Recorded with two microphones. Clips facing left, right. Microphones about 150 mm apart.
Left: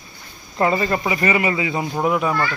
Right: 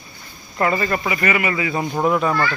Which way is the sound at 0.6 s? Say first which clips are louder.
Left 1 dB; 20° left (ahead or behind).